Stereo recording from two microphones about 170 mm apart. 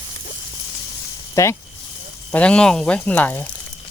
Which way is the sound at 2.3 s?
5° left (ahead or behind).